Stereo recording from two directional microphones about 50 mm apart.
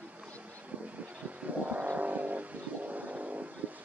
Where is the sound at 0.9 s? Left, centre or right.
Right.